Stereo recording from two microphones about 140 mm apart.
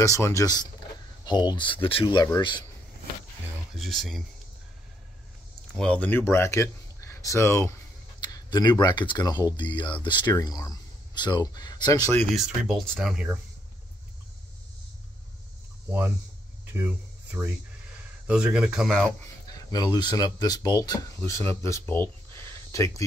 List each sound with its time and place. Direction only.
0.0 s speech: 20° left (ahead or behind)
3.7 s speech: centre (ahead or behind)
5.8 s speech: 10° left (ahead or behind)
8.2 s speech: 30° left (ahead or behind)
12.4 s speech: centre (ahead or behind)
16.7 s speech: 10° right (ahead or behind); by 19.1 s 5° left (ahead or behind)
19.5 s speech: 25° left (ahead or behind)